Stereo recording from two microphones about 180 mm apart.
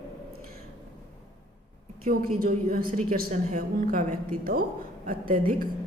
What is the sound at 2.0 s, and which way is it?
A woman's voice, 55° right (ahead or behind).